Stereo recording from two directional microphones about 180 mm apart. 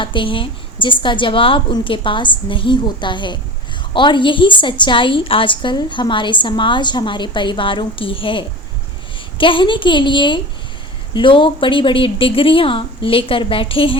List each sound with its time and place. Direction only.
0.0 s a woman's voice: 25° left (ahead or behind)